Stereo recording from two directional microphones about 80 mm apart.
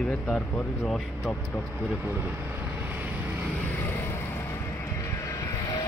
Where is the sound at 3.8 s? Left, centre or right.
Left.